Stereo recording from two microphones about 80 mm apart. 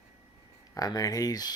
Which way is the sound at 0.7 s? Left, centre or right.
Left.